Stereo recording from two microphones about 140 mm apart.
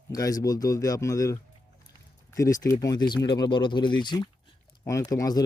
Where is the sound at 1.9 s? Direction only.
25° left (ahead or behind).